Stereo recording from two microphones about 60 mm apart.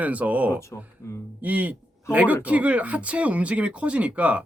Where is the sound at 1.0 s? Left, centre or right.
Left.